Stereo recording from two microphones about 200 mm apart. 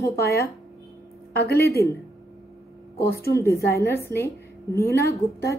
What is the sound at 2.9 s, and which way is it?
Speech, 50° left (ahead or behind).